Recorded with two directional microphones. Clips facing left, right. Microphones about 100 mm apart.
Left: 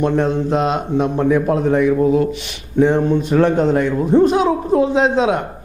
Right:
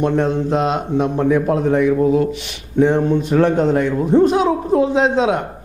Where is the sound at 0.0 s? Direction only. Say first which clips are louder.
Even; 20° left (ahead or behind).